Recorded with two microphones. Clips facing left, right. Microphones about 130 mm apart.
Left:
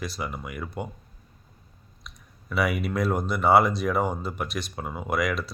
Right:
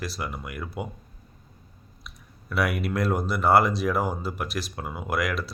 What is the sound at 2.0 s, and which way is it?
Speech, centre (ahead or behind).